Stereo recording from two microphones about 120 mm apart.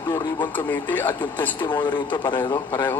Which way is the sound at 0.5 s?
15° left (ahead or behind).